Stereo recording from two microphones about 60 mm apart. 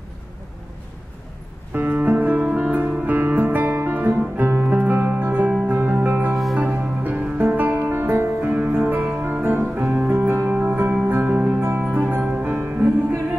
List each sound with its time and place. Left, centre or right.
1.7 s music: right
10.5 s music: right